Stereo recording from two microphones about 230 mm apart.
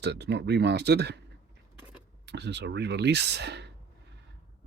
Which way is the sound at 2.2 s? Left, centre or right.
Right.